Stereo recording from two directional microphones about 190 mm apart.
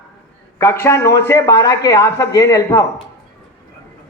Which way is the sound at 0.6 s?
15° left (ahead or behind).